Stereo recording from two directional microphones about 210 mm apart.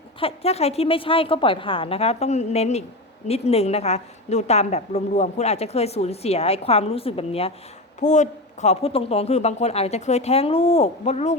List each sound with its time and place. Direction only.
0.2 s a woman's voice: 30° left (ahead or behind)